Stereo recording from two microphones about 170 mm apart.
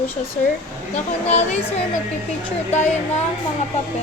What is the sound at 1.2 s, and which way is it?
Speech, 40° left (ahead or behind).